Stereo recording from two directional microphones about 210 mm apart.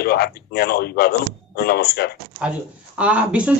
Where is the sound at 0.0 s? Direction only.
50° left (ahead or behind).